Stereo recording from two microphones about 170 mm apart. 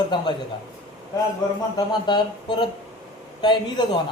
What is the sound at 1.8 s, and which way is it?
A man's voice, 25° left (ahead or behind).